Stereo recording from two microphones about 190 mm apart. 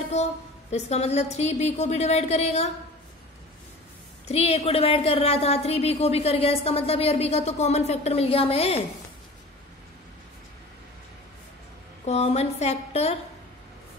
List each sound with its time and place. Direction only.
0.1 s a woman's voice: 35° left (ahead or behind)
4.3 s a woman's voice: 35° left (ahead or behind)
12.0 s a woman's voice: 35° left (ahead or behind)